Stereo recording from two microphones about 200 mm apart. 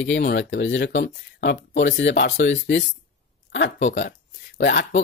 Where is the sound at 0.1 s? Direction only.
60° left (ahead or behind).